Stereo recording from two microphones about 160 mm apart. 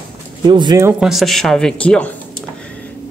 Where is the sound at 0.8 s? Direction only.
5° right (ahead or behind).